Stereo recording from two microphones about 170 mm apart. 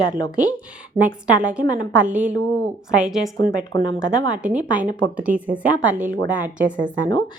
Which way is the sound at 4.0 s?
5° right (ahead or behind).